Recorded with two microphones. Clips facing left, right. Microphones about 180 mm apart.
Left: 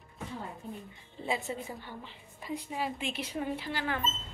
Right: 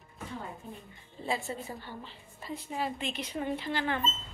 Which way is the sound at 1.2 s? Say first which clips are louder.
Even; 20° left (ahead or behind).